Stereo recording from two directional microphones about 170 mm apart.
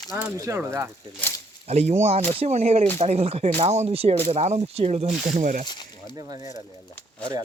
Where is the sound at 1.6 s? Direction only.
40° right (ahead or behind).